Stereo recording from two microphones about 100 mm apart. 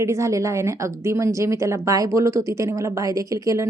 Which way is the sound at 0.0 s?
30° right (ahead or behind).